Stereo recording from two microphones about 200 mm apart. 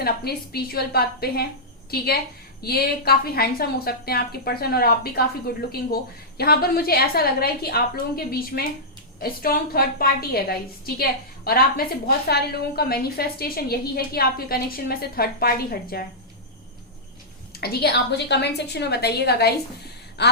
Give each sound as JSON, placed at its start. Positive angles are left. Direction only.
{"t": 0.0, "sound": "a woman's voice", "side_deg": 50}
{"t": 2.6, "sound": "a woman's voice", "side_deg": 50}
{"t": 17.6, "sound": "a woman's voice", "side_deg": 55}